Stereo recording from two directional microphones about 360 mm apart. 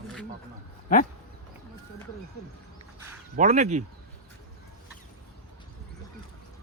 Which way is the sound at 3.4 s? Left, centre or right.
Centre.